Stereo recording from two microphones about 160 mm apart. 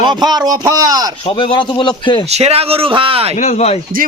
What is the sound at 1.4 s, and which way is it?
Speech, 30° left (ahead or behind).